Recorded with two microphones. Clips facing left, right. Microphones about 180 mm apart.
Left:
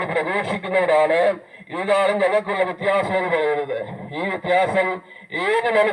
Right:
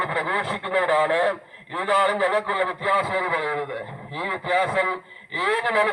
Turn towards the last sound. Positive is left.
turn(degrees=20)  # may be behind; listen again after turning